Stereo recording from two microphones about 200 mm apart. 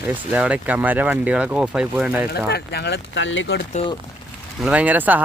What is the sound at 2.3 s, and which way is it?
Speech, 55° left (ahead or behind).